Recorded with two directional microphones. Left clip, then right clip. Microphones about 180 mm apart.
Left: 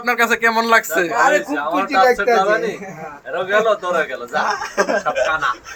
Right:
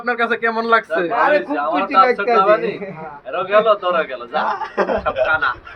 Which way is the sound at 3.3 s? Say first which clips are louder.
Right 2 dB; 45° left (ahead or behind).